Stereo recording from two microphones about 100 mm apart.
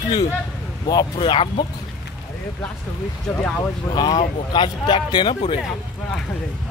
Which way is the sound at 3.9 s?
50° left (ahead or behind).